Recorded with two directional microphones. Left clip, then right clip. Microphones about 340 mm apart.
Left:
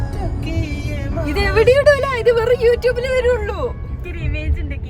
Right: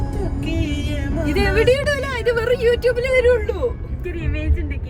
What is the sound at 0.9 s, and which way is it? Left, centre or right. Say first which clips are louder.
Speech: left 1 dB; centre.